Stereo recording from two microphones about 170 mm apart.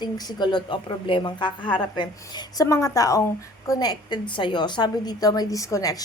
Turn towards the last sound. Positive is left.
turn(degrees=20)  # may be behind; listen again after turning